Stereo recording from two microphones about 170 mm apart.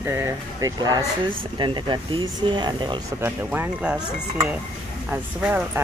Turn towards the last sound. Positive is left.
turn(degrees=-10)  # may be behind; listen again after turning